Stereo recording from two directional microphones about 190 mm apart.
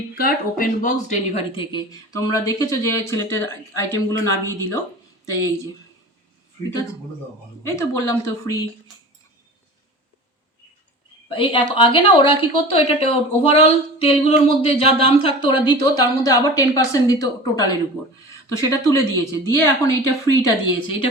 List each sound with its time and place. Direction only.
0.2 s speech: 50° left (ahead or behind)
1.5 s speech: 20° left (ahead or behind)
7.6 s speech: 15° left (ahead or behind)
11.3 s speech: 25° left (ahead or behind)